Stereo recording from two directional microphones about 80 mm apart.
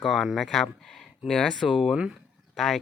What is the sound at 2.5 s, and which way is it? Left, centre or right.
Speech, centre.